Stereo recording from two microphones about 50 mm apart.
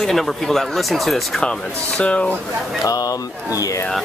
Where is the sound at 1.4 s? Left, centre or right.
Centre.